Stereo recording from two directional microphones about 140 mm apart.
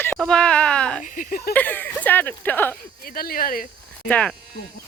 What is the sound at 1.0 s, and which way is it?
Speech, 70° left (ahead or behind).